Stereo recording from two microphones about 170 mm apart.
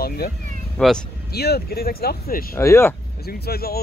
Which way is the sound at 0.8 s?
5° left (ahead or behind).